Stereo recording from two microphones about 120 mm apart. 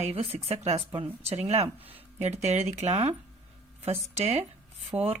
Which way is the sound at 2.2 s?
65° right (ahead or behind).